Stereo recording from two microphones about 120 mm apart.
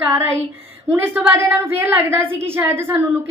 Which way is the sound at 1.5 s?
20° right (ahead or behind).